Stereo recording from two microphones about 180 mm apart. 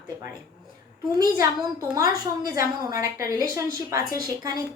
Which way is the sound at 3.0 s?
20° right (ahead or behind).